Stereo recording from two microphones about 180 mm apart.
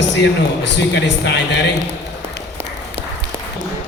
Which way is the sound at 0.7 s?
75° left (ahead or behind).